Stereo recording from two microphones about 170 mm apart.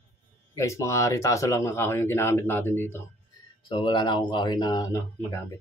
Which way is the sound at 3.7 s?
30° left (ahead or behind).